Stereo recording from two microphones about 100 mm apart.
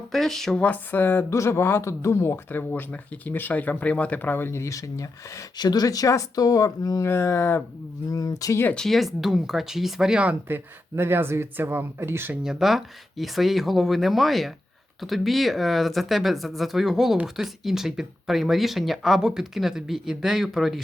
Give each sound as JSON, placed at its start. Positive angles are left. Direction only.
{"t": 0.1, "sound": "speech", "side_deg": 0}
{"t": 7.1, "sound": "speech", "side_deg": 25}
{"t": 8.1, "sound": "speech", "side_deg": 35}
{"t": 8.6, "sound": "speech", "side_deg": 5}
{"t": 12.4, "sound": "speech", "side_deg": -5}